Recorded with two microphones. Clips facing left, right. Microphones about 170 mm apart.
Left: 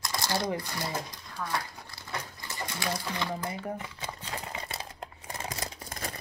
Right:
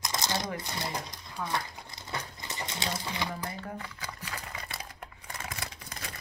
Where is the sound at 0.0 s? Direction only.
20° right (ahead or behind).